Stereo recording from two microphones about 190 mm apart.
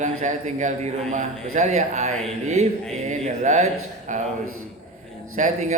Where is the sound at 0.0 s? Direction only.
40° right (ahead or behind).